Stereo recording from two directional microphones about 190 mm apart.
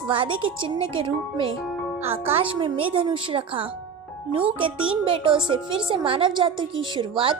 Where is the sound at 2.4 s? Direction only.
25° right (ahead or behind).